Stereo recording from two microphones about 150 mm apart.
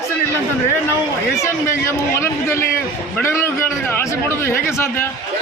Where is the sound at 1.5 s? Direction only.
20° left (ahead or behind).